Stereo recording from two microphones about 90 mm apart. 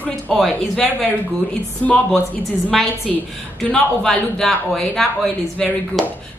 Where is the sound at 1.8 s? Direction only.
15° left (ahead or behind).